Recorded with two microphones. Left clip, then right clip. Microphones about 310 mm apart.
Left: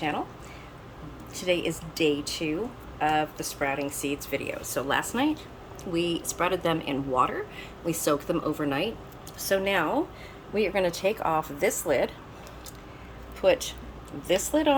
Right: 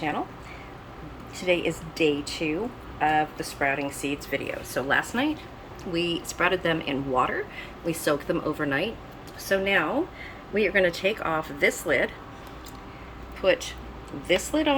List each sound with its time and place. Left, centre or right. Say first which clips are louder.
1.4 s speech: right 2 dB; centre
13.4 s speech: even; centre